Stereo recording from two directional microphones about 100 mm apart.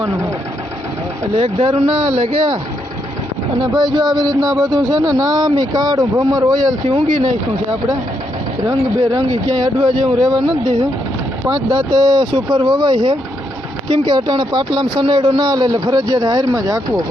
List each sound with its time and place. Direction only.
1.4 s speech: 65° right (ahead or behind)
3.6 s speech: 45° right (ahead or behind)
6.9 s speech: 55° right (ahead or behind)
9.5 s speech: 45° right (ahead or behind)